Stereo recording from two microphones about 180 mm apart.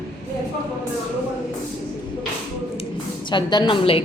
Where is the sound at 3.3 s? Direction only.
25° left (ahead or behind).